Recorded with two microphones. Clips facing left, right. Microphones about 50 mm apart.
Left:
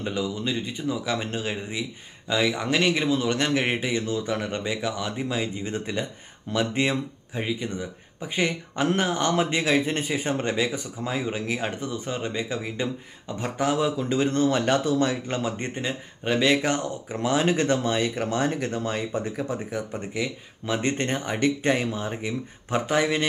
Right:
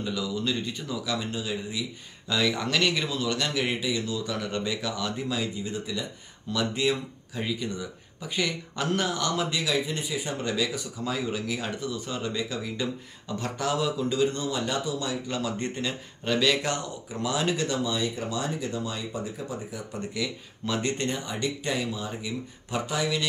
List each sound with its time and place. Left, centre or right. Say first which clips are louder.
0.0 s speech: left 3 dB; left
0.4 s a man's voice: left 1 dB; left
1.0 s speech: left 3 dB; left
2.3 s a man's voice: left 2 dB; centre; by 9.8 s left
9.8 s a man's voice: left 4 dB; left
19.9 s speech: left 2 dB; left